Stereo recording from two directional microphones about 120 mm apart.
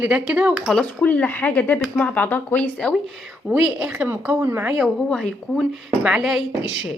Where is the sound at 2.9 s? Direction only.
Centre (ahead or behind); by 4.7 s 20° right (ahead or behind).